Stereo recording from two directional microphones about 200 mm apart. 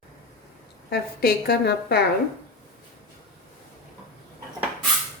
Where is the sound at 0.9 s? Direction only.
50° left (ahead or behind).